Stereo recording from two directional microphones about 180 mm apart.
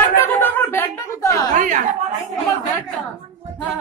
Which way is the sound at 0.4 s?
15° left (ahead or behind).